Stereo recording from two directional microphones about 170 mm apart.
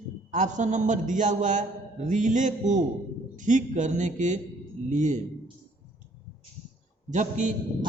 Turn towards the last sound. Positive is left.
turn(degrees=-45)  # may be behind; listen again after turning